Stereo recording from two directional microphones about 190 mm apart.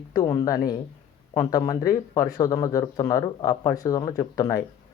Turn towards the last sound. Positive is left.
turn(degrees=15)  # may be behind; listen again after turning